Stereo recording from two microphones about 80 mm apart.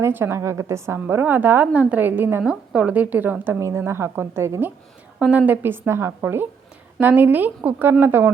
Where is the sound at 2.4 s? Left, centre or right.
Centre.